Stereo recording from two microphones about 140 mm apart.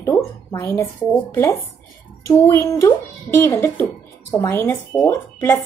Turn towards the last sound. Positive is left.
turn(degrees=20)  # may be behind; listen again after turning